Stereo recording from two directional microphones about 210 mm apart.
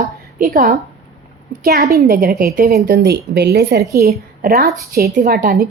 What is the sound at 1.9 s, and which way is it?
A woman's voice, 45° right (ahead or behind).